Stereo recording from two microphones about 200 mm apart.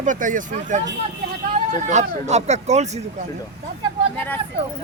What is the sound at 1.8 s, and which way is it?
Speech, 35° right (ahead or behind).